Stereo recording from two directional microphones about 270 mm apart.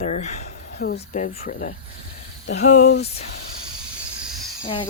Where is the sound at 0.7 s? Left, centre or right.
Left.